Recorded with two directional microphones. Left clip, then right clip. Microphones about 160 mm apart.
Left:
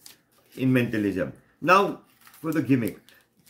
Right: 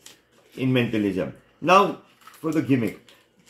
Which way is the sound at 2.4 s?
10° left (ahead or behind).